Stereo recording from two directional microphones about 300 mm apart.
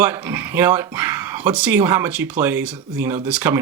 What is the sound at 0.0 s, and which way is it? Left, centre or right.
Speech, centre.